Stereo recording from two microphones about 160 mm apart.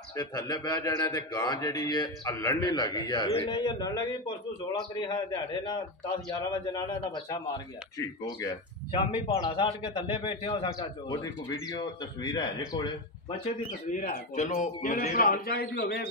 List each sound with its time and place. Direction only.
0.1 s a man's voice: 25° left (ahead or behind)
11.1 s speech: 20° left (ahead or behind)
13.7 s a man's voice: 55° left (ahead or behind)
15.1 s a man's voice: 65° left (ahead or behind); by 16.1 s 85° left